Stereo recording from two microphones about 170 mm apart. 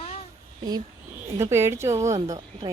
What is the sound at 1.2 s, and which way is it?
Speech, 15° right (ahead or behind).